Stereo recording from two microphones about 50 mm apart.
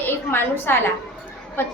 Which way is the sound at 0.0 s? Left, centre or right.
Left.